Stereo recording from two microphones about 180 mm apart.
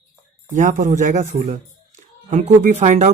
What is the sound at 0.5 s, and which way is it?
Speech, 45° right (ahead or behind).